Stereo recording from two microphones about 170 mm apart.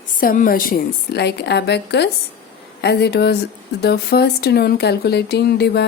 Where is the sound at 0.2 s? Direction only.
55° left (ahead or behind).